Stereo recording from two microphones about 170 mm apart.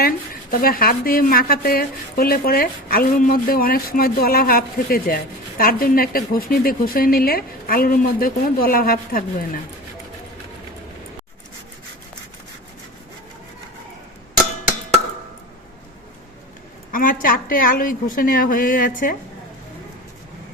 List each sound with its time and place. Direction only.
0.5 s a woman's voice: 60° left (ahead or behind)
16.9 s a woman's voice: 55° left (ahead or behind)